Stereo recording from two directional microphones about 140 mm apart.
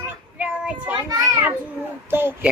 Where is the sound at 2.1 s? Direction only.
15° right (ahead or behind).